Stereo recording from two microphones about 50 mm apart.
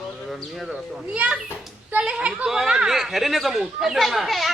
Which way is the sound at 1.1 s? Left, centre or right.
Right.